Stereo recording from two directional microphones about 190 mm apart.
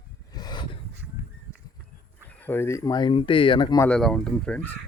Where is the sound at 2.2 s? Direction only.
10° left (ahead or behind).